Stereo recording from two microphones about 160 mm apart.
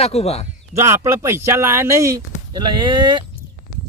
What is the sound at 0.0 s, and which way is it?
Speech, 40° left (ahead or behind).